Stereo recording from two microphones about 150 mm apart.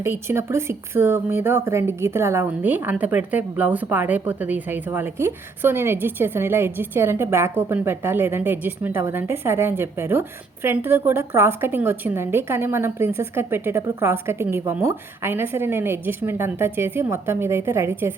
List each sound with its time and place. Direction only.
0.0 s a woman's voice: 15° right (ahead or behind)